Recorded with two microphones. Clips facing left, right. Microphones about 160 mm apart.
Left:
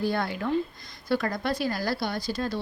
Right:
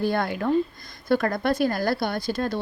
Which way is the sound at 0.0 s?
50° right (ahead or behind).